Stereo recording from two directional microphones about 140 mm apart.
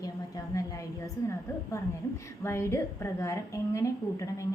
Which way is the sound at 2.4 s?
20° left (ahead or behind).